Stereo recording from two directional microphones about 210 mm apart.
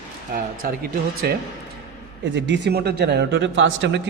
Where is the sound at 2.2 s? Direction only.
60° right (ahead or behind).